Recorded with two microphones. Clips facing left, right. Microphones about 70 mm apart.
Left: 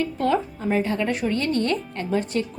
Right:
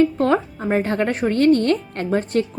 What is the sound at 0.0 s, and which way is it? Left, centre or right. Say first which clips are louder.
Speech: right 5 dB; right.